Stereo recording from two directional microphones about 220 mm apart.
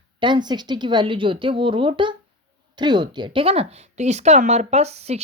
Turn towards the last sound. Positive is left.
turn(degrees=-30)  # may be behind; listen again after turning